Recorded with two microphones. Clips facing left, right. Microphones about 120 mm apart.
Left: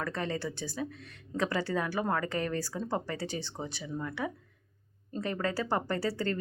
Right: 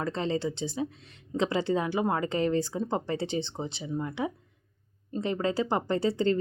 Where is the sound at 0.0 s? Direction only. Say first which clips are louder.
Right 5 dB; 25° right (ahead or behind).